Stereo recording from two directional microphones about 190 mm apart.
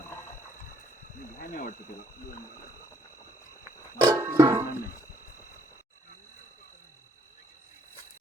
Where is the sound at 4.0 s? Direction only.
20° right (ahead or behind).